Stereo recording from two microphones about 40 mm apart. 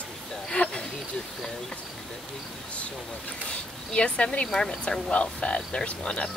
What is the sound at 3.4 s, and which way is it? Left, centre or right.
Speech, left.